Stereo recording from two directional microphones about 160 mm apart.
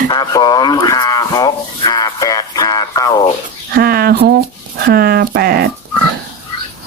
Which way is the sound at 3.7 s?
70° right (ahead or behind).